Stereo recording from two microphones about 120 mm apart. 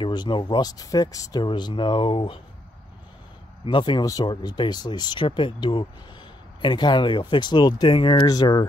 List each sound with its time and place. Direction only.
0.0 s speech: 40° left (ahead or behind)
3.6 s speech: 40° left (ahead or behind)